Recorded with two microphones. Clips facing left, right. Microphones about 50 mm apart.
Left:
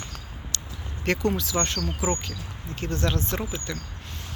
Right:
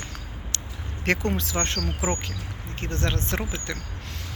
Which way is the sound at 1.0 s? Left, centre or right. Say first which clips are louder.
Even; right.